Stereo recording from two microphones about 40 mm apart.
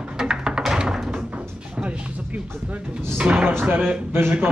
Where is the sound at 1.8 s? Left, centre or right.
Right.